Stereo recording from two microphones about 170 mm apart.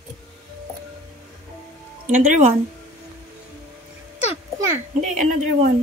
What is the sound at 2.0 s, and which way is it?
Speech, 45° right (ahead or behind).